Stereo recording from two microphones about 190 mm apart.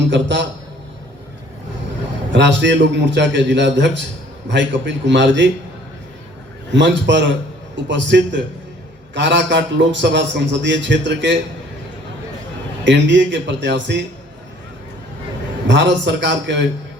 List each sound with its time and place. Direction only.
0.1 s a man's voice: 75° right (ahead or behind)
2.3 s a man's voice: 70° right (ahead or behind)
6.7 s a man's voice: 70° right (ahead or behind)
12.8 s a man's voice: 70° right (ahead or behind)
15.6 s a man's voice: 70° right (ahead or behind)